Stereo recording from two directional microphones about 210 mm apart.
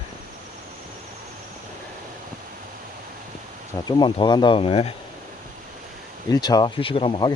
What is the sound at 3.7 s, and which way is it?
Speech, 20° left (ahead or behind).